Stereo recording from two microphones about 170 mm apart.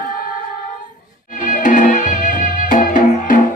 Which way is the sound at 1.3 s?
50° left (ahead or behind).